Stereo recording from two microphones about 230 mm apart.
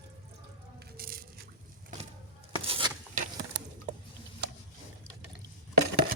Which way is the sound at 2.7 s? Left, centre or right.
Centre.